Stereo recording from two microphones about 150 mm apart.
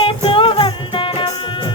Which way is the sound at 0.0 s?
35° left (ahead or behind).